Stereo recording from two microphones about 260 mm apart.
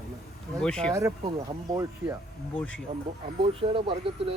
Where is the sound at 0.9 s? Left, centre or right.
Centre.